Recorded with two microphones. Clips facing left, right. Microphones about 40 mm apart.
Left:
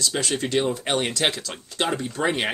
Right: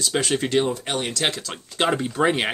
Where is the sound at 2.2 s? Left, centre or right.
Centre.